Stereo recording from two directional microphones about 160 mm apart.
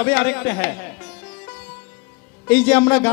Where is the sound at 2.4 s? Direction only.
5° left (ahead or behind).